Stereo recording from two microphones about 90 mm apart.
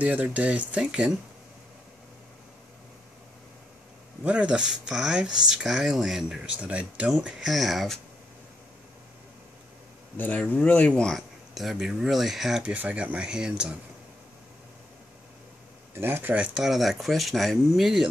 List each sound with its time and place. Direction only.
0.0 s speech: 15° right (ahead or behind)
4.2 s speech: 15° right (ahead or behind)
10.1 s speech: 20° left (ahead or behind)
11.0 s speech: 5° left (ahead or behind)
12.6 s speech: 15° right (ahead or behind)
15.9 s speech: 25° right (ahead or behind)
16.5 s speech: 5° right (ahead or behind)